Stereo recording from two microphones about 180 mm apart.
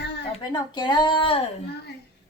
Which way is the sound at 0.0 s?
65° left (ahead or behind).